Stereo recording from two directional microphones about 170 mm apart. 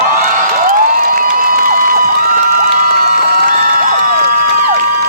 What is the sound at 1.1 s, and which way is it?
Cheering, 55° right (ahead or behind).